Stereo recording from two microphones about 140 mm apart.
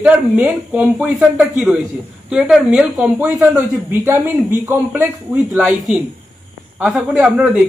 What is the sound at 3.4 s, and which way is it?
A man's voice, 20° right (ahead or behind).